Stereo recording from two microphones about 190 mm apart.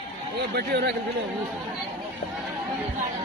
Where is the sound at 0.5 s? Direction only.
55° right (ahead or behind).